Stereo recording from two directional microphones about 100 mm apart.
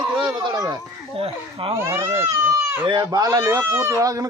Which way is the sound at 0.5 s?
40° right (ahead or behind).